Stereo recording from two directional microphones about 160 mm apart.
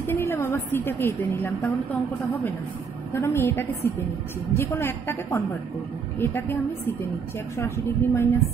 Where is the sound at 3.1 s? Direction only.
15° left (ahead or behind).